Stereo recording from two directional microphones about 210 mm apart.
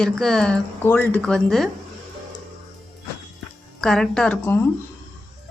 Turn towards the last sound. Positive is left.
turn(degrees=10)  # may be behind; listen again after turning